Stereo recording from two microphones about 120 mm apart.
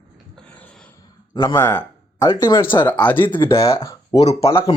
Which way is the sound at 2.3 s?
35° left (ahead or behind).